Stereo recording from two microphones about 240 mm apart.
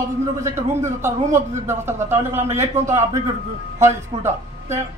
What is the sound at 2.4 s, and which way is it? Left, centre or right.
Speech, right.